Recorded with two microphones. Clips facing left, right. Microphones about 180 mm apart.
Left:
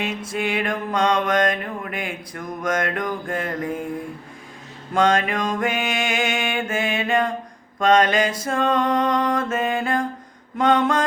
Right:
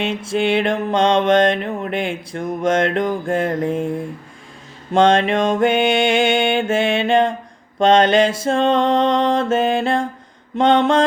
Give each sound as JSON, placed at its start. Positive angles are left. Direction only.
{"t": 0.0, "sound": "mantra", "side_deg": -30}
{"t": 4.9, "sound": "mantra", "side_deg": -30}